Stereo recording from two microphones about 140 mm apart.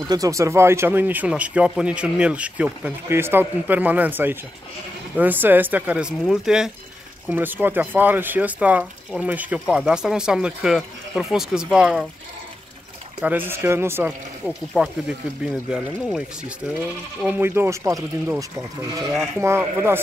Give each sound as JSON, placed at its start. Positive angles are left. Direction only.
{"t": 0.1, "sound": "speech", "side_deg": -25}
{"t": 13.2, "sound": "speech", "side_deg": -15}
{"t": 14.4, "sound": "speech", "side_deg": -5}
{"t": 19.4, "sound": "speech", "side_deg": -15}